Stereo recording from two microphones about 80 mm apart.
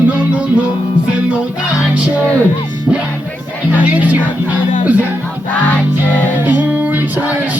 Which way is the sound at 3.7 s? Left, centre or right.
Centre.